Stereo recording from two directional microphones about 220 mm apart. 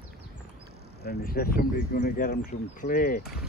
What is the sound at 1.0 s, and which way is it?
Speech, 45° left (ahead or behind).